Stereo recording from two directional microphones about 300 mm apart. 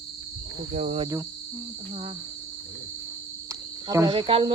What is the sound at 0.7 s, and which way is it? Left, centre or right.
Cricket, right.